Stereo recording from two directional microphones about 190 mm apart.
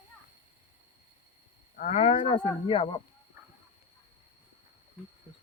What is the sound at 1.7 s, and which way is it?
Speech, 40° left (ahead or behind).